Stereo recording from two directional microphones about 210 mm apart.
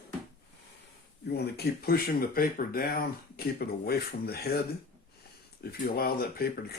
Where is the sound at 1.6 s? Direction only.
45° left (ahead or behind).